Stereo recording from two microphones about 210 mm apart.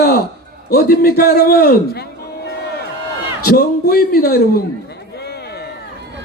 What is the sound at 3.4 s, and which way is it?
Speech, 45° left (ahead or behind).